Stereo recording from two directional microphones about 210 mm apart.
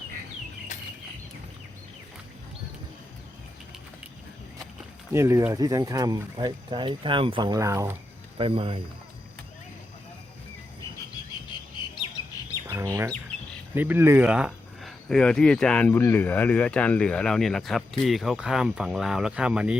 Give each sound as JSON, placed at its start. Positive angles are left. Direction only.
{"t": 0.7, "sound": "a sound", "side_deg": 35}
{"t": 5.1, "sound": "speech", "side_deg": -15}
{"t": 8.4, "sound": "speech", "side_deg": -25}
{"t": 11.5, "sound": "bird", "side_deg": 20}
{"t": 12.6, "sound": "speech", "side_deg": -15}